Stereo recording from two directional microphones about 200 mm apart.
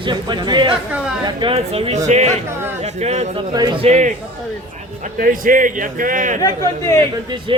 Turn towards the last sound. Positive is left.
turn(degrees=-25)  # may be behind; listen again after turning